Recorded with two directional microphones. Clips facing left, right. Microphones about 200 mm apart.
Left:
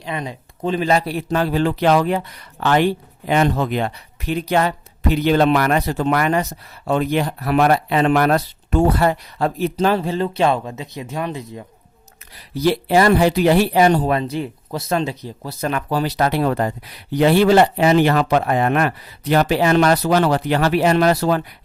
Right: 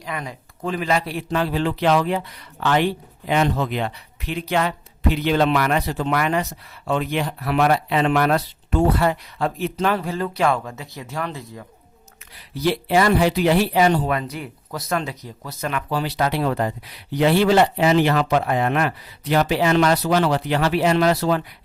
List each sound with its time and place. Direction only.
0.0 s speech: 25° left (ahead or behind)
0.9 s speech: 40° left (ahead or behind); by 11.6 s 20° left (ahead or behind)
12.6 s speech: 45° left (ahead or behind)